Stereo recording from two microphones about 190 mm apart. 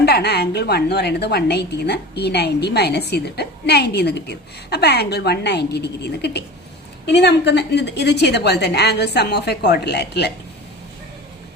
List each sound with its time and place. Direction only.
0.0 s a woman's voice: 60° left (ahead or behind)